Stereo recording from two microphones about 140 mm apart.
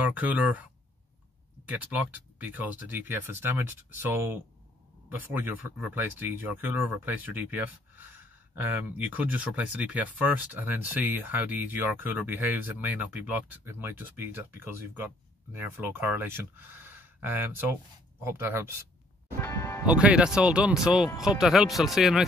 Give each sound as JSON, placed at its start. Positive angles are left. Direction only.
{"t": 0.0, "sound": "speech", "side_deg": -10}
{"t": 1.7, "sound": "speech", "side_deg": -10}
{"t": 19.4, "sound": "music", "side_deg": 20}
{"t": 19.9, "sound": "speech", "side_deg": -10}